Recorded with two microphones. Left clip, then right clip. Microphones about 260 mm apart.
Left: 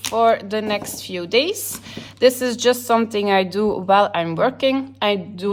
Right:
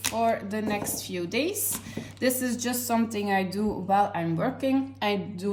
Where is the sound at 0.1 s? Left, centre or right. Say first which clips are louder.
Left 11 dB; left.